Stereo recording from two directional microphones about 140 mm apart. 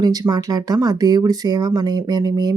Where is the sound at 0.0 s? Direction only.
25° right (ahead or behind).